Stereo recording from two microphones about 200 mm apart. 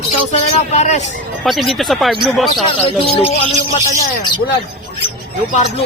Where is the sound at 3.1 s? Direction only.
30° left (ahead or behind).